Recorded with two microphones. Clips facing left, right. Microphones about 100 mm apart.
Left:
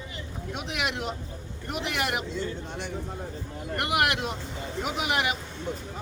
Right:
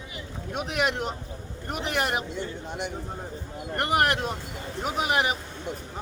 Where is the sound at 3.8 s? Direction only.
40° right (ahead or behind).